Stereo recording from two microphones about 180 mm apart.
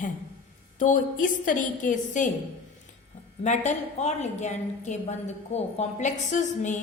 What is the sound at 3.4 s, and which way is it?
A woman's voice, 40° left (ahead or behind).